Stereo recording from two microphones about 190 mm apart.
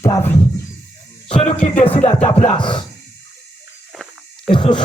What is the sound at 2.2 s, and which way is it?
Music, 35° left (ahead or behind).